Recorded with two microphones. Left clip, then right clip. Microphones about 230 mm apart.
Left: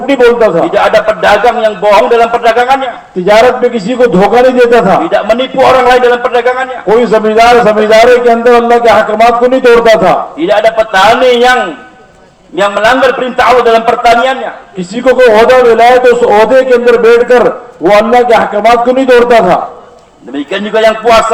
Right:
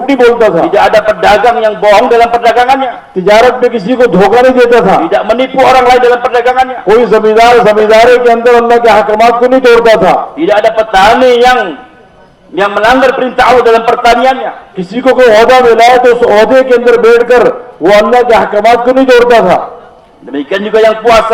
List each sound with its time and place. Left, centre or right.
0.1 s a man's voice: right
12.5 s a man's voice: right
21.0 s a man's voice: right